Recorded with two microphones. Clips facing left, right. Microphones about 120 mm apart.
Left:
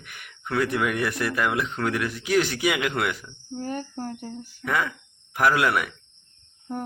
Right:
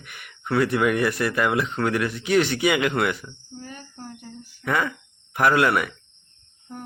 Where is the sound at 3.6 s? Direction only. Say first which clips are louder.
Left 9 dB; 45° left (ahead or behind).